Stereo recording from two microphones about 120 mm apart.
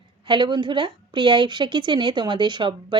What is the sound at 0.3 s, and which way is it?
Speech, 40° right (ahead or behind).